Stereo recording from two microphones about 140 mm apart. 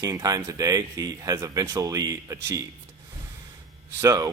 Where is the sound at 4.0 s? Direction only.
25° right (ahead or behind).